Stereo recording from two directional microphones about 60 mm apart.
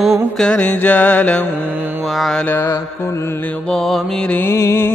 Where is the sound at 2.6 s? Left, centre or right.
Left.